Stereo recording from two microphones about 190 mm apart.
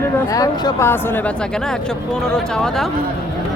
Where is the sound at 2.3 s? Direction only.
5° left (ahead or behind).